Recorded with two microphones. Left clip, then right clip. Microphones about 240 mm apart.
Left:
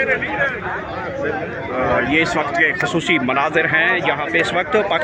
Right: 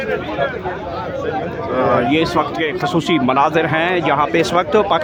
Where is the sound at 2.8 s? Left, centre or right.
Right.